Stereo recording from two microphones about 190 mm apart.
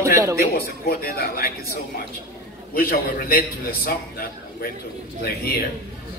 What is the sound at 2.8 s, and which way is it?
A man's voice, 50° left (ahead or behind).